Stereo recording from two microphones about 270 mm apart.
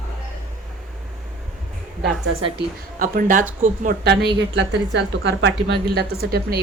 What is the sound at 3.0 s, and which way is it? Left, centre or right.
A woman's voice, right.